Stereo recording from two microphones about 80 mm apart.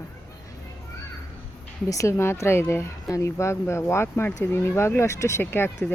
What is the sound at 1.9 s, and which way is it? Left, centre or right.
Speech, left.